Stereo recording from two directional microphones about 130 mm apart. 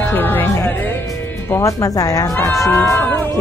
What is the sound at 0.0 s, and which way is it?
Music, 15° left (ahead or behind).